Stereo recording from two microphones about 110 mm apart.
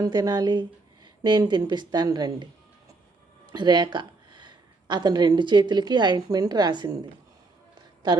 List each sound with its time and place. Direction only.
0.0 s speech: 40° right (ahead or behind)
3.5 s speech: 40° right (ahead or behind)